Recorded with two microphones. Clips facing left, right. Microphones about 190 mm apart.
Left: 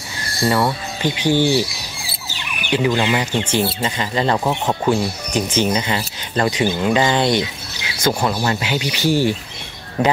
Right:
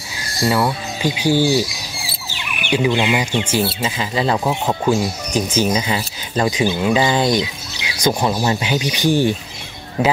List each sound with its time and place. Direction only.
0.5 s speech: 5° right (ahead or behind)
2.7 s speech: 15° right (ahead or behind)